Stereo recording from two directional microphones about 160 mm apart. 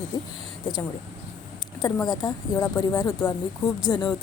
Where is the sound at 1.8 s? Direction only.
25° left (ahead or behind).